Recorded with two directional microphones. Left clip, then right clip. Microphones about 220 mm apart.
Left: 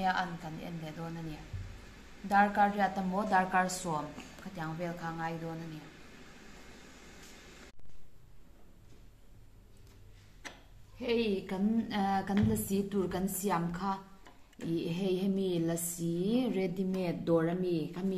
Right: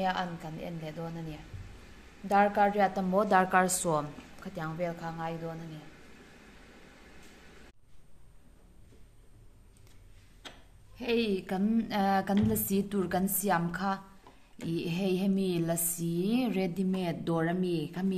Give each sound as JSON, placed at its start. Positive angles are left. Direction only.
{"t": 0.0, "sound": "a woman's voice", "side_deg": -35}
{"t": 4.6, "sound": "a woman's voice", "side_deg": -30}
{"t": 11.0, "sound": "speech", "side_deg": -50}